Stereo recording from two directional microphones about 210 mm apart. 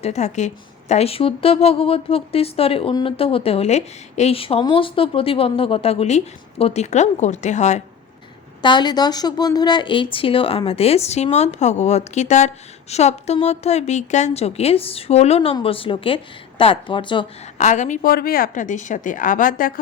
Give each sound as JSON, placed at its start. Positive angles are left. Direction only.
{"t": 0.0, "sound": "a woman's voice", "side_deg": 30}
{"t": 8.6, "sound": "a woman's voice", "side_deg": 20}
{"t": 17.6, "sound": "a woman's voice", "side_deg": 35}